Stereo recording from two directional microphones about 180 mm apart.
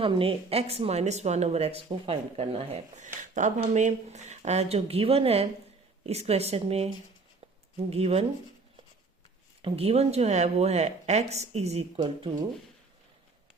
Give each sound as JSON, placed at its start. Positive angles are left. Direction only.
{"t": 0.0, "sound": "speech", "side_deg": -30}
{"t": 9.6, "sound": "speech", "side_deg": -30}